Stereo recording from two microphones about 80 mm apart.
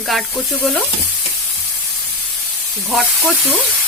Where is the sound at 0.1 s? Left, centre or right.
Centre.